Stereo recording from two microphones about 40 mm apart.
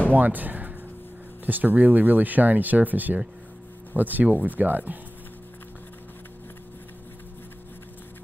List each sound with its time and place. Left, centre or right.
0.1 s speech: right